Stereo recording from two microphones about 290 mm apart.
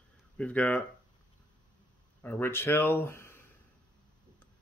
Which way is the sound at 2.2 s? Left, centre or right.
Centre.